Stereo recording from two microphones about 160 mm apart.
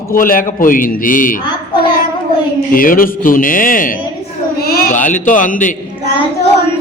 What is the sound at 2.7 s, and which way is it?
A man's voice, 60° left (ahead or behind).